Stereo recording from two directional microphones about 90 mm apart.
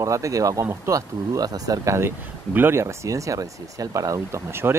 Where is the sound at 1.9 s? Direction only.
25° right (ahead or behind).